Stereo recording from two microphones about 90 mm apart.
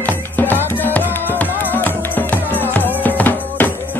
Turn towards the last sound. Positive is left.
turn(degrees=20)  # may be behind; listen again after turning